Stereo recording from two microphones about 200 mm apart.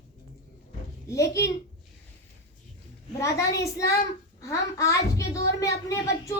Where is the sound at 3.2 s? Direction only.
15° left (ahead or behind).